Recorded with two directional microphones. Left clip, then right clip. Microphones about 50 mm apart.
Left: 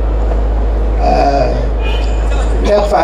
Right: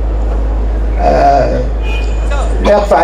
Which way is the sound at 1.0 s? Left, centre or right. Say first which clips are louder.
Right 3 dB; left.